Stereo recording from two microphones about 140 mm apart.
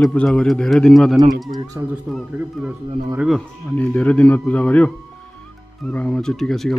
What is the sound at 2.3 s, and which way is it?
A man's voice, 5° right (ahead or behind).